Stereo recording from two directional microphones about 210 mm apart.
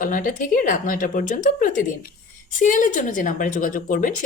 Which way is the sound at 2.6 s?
40° left (ahead or behind).